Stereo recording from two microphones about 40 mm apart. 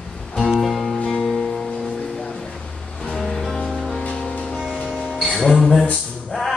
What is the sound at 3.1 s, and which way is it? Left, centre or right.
Music, centre.